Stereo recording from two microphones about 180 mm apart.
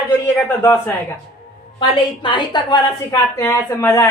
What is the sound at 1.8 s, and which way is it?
A man's voice, 25° left (ahead or behind).